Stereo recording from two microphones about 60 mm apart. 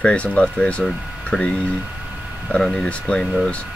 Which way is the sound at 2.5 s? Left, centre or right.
Centre.